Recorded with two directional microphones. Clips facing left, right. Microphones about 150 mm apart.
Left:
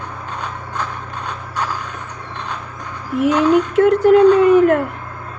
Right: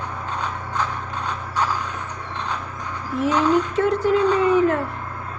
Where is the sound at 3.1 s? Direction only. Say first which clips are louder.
Left 5 dB; 60° left (ahead or behind).